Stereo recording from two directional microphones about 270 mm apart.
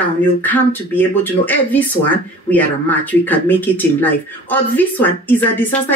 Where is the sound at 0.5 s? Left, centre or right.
Centre.